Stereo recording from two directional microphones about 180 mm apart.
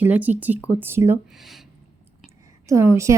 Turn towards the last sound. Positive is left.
turn(degrees=-15)  # may be behind; listen again after turning